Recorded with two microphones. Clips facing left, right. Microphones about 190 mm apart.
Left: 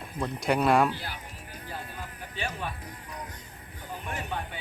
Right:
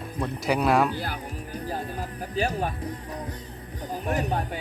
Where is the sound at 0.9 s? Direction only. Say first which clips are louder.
Right 8 dB; 40° right (ahead or behind).